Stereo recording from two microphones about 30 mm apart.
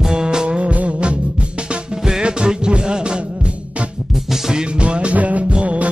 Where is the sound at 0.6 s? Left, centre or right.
Right.